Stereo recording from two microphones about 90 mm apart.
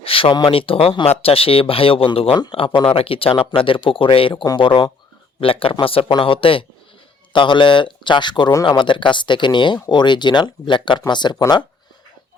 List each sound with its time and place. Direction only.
0.0 s a sound: 90° left
0.5 s speech: 90° left; by 2.8 s 70° left (ahead or behind)
2.9 s speech: 90° left
4.4 s speech: 60° left (ahead or behind)
5.4 s speech: 85° left
7.3 s speech: 65° left (ahead or behind)